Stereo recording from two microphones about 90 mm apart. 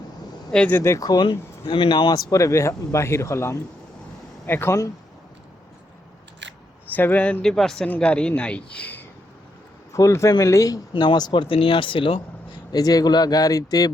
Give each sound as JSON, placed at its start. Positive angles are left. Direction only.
{"t": 0.7, "sound": "speech", "side_deg": 30}
{"t": 0.9, "sound": "speech", "side_deg": 45}
{"t": 2.1, "sound": "speech", "side_deg": 40}
{"t": 6.9, "sound": "speech", "side_deg": 20}
{"t": 7.4, "sound": "a man's voice", "side_deg": 5}
{"t": 9.9, "sound": "speech", "side_deg": 35}
{"t": 10.9, "sound": "speech", "side_deg": 60}
{"t": 11.4, "sound": "speech", "side_deg": 85}
{"t": 12.7, "sound": "speech", "side_deg": 45}